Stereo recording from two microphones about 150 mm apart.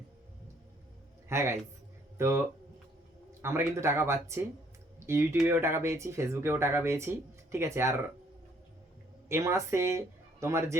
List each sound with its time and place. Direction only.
1.3 s speech: 20° right (ahead or behind)
3.4 s speech: 20° right (ahead or behind)
9.3 s speech: 20° right (ahead or behind)